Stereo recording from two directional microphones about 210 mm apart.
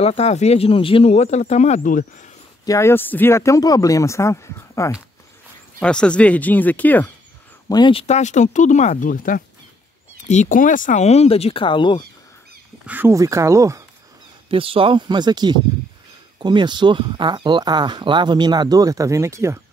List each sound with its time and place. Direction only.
0.0 s speech: 30° left (ahead or behind)
2.6 s speech: 15° left (ahead or behind)
7.6 s speech: 20° left (ahead or behind)
12.8 s speech: 10° right (ahead or behind)
14.5 s speech: 25° right (ahead or behind)